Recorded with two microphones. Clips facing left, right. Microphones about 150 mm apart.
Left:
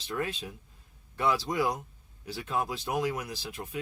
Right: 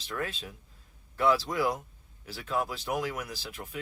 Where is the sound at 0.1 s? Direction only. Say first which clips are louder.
Left 2 dB; 20° left (ahead or behind).